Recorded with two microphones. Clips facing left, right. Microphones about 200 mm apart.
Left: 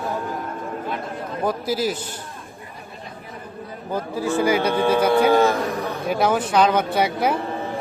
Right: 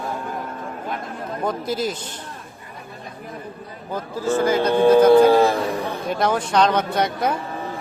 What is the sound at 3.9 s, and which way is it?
Speech, 10° left (ahead or behind).